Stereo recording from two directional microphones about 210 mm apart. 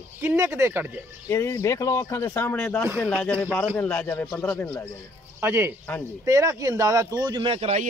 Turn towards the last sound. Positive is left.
turn(degrees=-30)  # may be behind; listen again after turning